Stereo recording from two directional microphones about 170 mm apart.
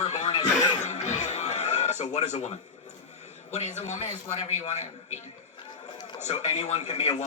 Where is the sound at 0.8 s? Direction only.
40° left (ahead or behind).